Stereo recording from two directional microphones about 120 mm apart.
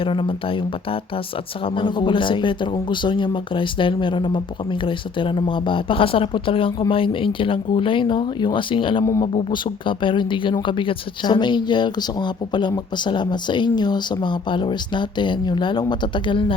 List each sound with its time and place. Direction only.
0.0 s speech: 45° left (ahead or behind)